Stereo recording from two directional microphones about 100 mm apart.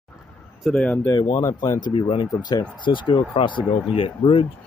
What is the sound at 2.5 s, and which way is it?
Speech, 50° left (ahead or behind).